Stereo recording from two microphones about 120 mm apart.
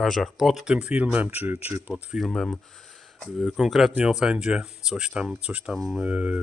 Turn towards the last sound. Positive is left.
turn(degrees=-10)  # may be behind; listen again after turning